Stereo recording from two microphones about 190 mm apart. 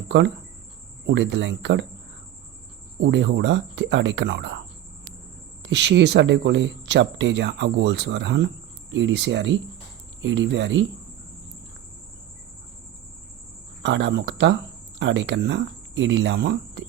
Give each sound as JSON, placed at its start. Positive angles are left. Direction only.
{"t": 0.1, "sound": "speech", "side_deg": -65}
{"t": 3.0, "sound": "speech", "side_deg": -70}
{"t": 5.6, "sound": "speech", "side_deg": -65}
{"t": 13.8, "sound": "speech", "side_deg": -70}